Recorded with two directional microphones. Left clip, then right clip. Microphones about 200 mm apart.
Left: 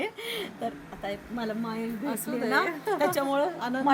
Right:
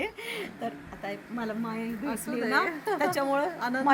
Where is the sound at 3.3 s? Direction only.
5° left (ahead or behind).